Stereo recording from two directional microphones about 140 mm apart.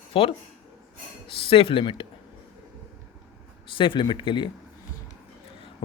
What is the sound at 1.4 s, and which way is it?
Speech, 40° left (ahead or behind).